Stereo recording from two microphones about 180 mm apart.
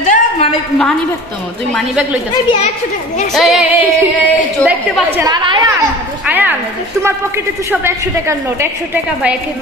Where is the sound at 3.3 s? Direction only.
Centre (ahead or behind).